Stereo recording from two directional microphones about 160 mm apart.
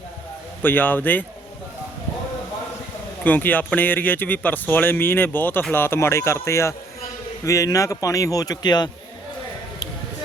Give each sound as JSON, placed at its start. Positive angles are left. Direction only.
{"t": 0.6, "sound": "speech", "side_deg": 10}
{"t": 3.2, "sound": "a man's voice", "side_deg": 10}